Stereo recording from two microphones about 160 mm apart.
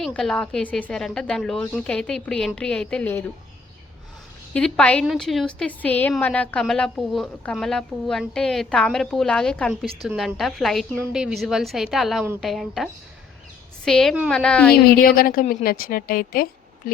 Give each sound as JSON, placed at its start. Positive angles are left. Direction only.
{"t": 0.0, "sound": "a woman's voice", "side_deg": 5}
{"t": 4.5, "sound": "a woman's voice", "side_deg": 5}
{"t": 14.8, "sound": "a woman's voice", "side_deg": 65}